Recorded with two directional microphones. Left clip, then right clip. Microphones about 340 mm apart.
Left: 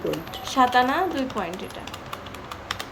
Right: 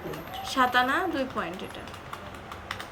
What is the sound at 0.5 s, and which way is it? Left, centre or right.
Speech, centre.